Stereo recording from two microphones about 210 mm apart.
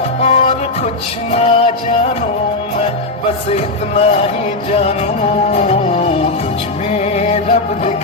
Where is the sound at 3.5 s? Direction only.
30° left (ahead or behind).